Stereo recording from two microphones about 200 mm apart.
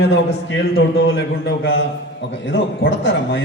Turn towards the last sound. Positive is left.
turn(degrees=70)  # may be behind; listen again after turning